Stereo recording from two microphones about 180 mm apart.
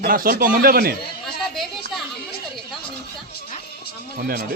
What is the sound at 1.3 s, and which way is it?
Speech, centre (ahead or behind).